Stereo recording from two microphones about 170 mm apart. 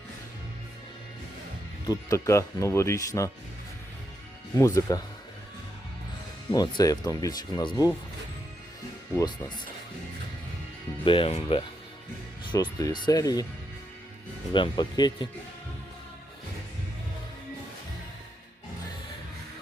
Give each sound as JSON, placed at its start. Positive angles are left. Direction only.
{"t": 1.9, "sound": "speech", "side_deg": 20}
{"t": 4.5, "sound": "speech", "side_deg": 20}
{"t": 6.5, "sound": "speech", "side_deg": 25}
{"t": 11.0, "sound": "speech", "side_deg": 30}
{"t": 12.5, "sound": "speech", "side_deg": 25}
{"t": 14.5, "sound": "speech", "side_deg": 25}